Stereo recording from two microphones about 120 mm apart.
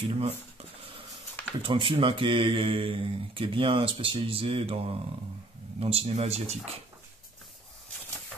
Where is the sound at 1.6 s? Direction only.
45° right (ahead or behind).